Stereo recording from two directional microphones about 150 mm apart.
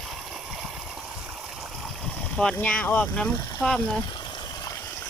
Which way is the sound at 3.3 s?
25° left (ahead or behind).